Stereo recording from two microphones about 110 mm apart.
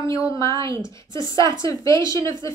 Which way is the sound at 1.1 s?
45° right (ahead or behind).